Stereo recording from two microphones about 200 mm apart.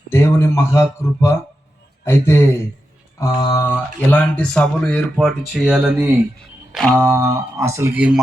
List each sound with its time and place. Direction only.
0.1 s speech: 10° left (ahead or behind)
7.0 s speech: 15° right (ahead or behind)